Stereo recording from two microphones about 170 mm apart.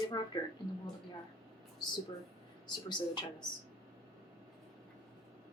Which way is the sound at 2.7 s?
25° left (ahead or behind).